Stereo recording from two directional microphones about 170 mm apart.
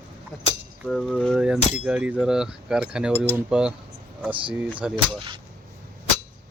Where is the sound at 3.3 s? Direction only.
10° right (ahead or behind).